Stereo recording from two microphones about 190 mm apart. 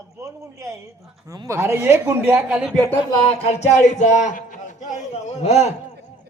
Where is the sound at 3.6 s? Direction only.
40° left (ahead or behind).